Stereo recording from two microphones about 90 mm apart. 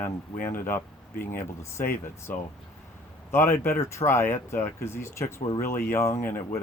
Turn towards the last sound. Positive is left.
turn(degrees=25)  # may be behind; listen again after turning